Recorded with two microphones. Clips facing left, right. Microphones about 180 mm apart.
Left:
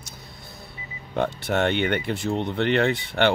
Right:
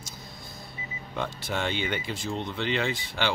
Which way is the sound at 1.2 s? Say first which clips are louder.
Left 8 dB; 65° left (ahead or behind).